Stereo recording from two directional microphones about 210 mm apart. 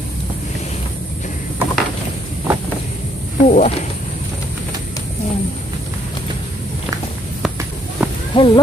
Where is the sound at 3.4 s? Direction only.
35° left (ahead or behind).